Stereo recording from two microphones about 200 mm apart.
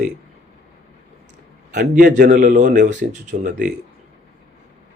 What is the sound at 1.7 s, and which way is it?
A man's voice, 50° right (ahead or behind).